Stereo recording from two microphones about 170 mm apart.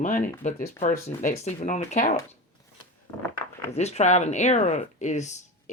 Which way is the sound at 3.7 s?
40° left (ahead or behind).